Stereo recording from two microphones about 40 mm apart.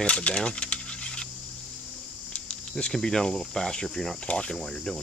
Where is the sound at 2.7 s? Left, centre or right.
Centre.